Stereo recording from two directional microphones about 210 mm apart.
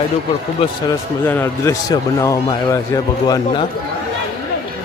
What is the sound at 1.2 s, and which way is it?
A man's voice, 10° left (ahead or behind).